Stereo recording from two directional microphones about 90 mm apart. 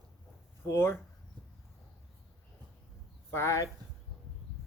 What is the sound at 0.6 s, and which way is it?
Speech, 25° left (ahead or behind).